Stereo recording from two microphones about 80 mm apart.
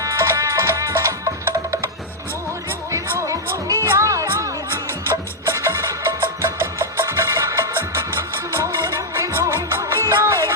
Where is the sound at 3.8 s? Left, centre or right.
Right.